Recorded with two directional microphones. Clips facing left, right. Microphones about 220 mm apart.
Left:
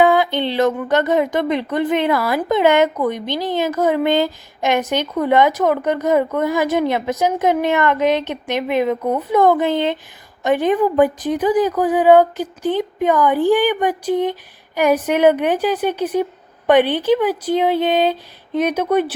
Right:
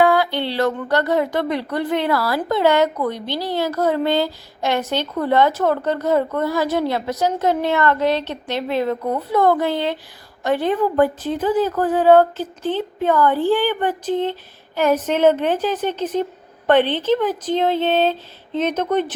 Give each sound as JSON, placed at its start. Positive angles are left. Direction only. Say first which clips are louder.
{"t": 0.0, "sound": "a woman's voice", "louder": "left 2 dB", "side_deg": 20}